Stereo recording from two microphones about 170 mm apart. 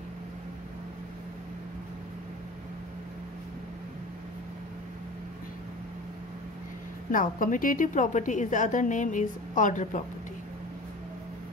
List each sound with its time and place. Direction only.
7.1 s a woman's voice: 50° left (ahead or behind)